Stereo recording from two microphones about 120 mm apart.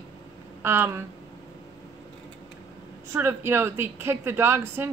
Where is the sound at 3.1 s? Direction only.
20° right (ahead or behind).